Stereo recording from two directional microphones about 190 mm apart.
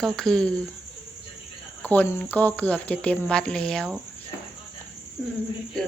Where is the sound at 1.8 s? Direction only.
10° left (ahead or behind).